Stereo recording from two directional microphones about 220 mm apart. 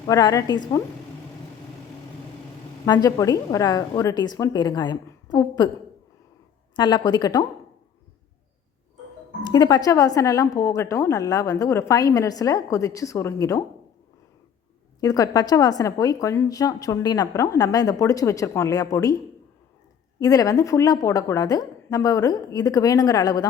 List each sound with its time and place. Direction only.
0.1 s a woman's voice: 15° left (ahead or behind)
2.8 s a woman's voice: 15° left (ahead or behind)
6.7 s a woman's voice: 20° left (ahead or behind)
9.4 s a woman's voice: 20° left (ahead or behind)
15.0 s a woman's voice: 15° left (ahead or behind)
20.1 s a woman's voice: 15° left (ahead or behind)